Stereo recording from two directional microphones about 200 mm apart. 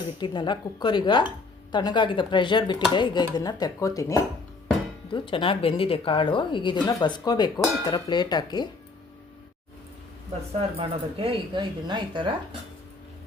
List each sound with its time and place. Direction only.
0.2 s a woman's voice: 20° left (ahead or behind)
10.8 s speech: 25° right (ahead or behind)